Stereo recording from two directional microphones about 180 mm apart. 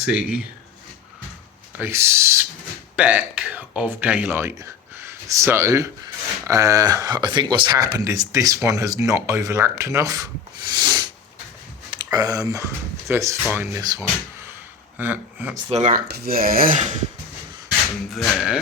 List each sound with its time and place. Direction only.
0.0 s speech: 5° right (ahead or behind)
1.8 s speech: 15° right (ahead or behind)
10.7 s a sound: 20° right (ahead or behind)
11.9 s speech: 25° right (ahead or behind)
15.7 s speech: 40° right (ahead or behind)
16.0 s speech: 60° right (ahead or behind); by 17.1 s 40° right (ahead or behind)
18.1 s speech: centre (ahead or behind)